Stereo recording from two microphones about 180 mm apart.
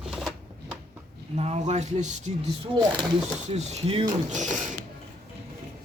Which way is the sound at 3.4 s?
40° right (ahead or behind).